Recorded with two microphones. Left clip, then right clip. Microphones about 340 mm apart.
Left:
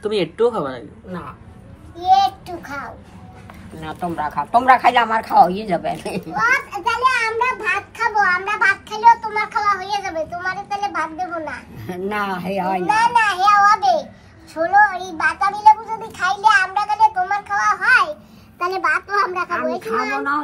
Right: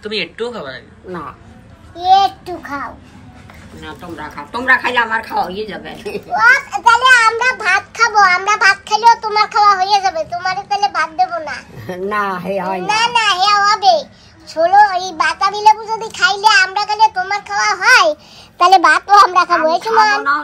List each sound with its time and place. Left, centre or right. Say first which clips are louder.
0.0 s speech: left 3 dB; centre
3.8 s a woman's voice: left 5 dB; left
6.3 s a child's voice: right 7 dB; right